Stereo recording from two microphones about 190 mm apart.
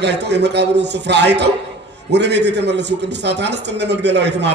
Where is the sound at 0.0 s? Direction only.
65° right (ahead or behind).